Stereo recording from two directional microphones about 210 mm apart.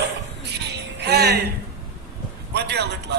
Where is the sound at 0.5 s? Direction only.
55° right (ahead or behind).